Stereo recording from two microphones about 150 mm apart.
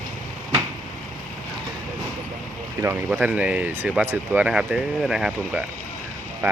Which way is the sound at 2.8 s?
15° right (ahead or behind).